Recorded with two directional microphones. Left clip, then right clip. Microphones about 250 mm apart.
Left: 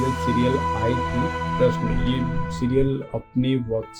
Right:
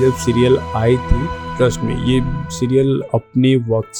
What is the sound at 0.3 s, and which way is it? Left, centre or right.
Speech, right.